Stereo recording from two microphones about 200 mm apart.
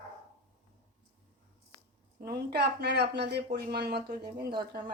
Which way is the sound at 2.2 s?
50° right (ahead or behind).